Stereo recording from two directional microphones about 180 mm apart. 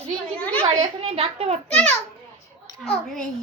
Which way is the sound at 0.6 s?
30° right (ahead or behind).